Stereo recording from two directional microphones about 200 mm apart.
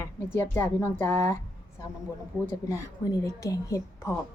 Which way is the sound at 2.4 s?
15° left (ahead or behind).